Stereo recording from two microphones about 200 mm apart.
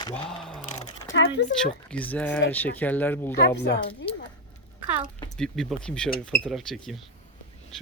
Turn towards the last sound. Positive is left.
turn(degrees=0)  # may be behind; listen again after turning